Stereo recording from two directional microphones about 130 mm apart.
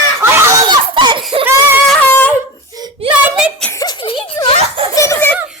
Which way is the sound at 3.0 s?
50° right (ahead or behind).